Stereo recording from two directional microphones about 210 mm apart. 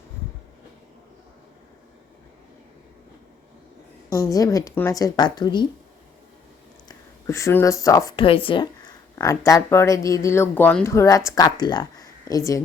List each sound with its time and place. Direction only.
4.1 s speech: 15° left (ahead or behind)
6.8 s speech: 15° left (ahead or behind)
9.1 s speech: 15° left (ahead or behind)